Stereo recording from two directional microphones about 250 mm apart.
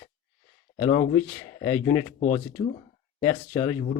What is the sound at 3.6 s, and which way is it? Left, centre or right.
Speech, centre.